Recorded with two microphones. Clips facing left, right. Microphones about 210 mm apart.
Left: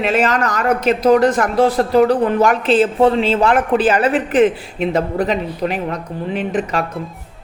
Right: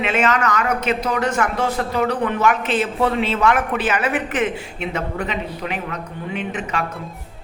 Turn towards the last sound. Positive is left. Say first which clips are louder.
# left 6 dB
turn(degrees=35)  # may be behind; listen again after turning